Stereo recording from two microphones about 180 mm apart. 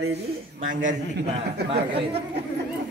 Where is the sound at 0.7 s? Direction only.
80° right.